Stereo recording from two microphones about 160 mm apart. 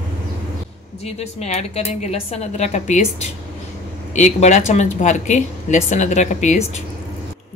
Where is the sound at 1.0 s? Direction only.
40° left (ahead or behind).